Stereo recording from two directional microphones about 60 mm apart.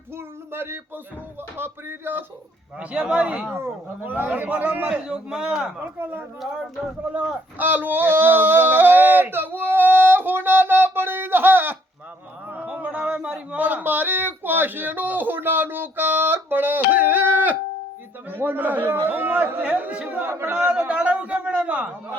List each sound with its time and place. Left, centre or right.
0.2 s a sound: right
1.5 s speech: right
2.7 s speech: centre
3.5 s speech: right
4.1 s a man's voice: right
5.0 s speech: centre
6.0 s speech: right
7.1 s a man's voice: right
7.7 s a sound: right
12.5 s a sound: right
18.3 s a man's voice: right